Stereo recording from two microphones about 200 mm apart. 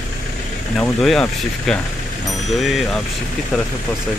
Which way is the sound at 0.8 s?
Centre (ahead or behind).